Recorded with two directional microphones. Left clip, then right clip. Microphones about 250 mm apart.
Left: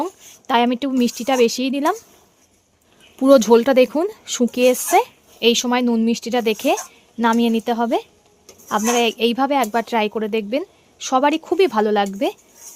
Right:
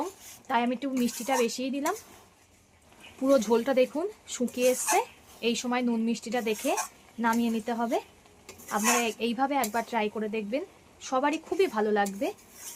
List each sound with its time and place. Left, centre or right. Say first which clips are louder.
0.0 s speech: left 9 dB; left
3.2 s speech: left 12 dB; left